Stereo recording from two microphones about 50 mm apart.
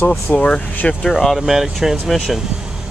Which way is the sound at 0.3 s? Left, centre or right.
Left.